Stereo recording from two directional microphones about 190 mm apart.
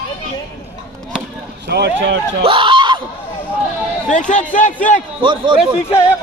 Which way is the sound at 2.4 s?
25° right (ahead or behind).